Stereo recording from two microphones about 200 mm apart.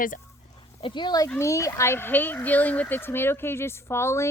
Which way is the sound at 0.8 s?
25° left (ahead or behind).